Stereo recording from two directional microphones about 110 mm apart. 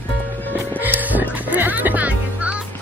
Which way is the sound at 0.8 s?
15° right (ahead or behind).